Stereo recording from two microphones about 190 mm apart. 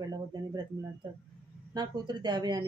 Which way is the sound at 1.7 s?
20° right (ahead or behind).